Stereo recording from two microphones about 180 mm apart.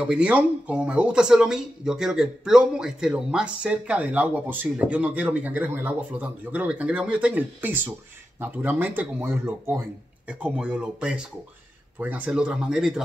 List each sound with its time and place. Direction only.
0.0 s speech: 5° right (ahead or behind)